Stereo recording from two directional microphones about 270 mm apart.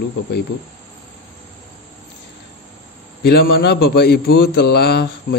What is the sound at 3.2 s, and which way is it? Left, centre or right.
A man's voice, left.